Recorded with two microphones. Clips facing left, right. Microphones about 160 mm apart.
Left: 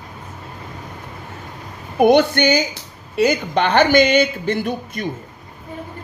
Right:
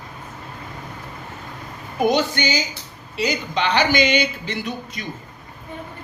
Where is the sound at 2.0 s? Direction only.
60° left (ahead or behind).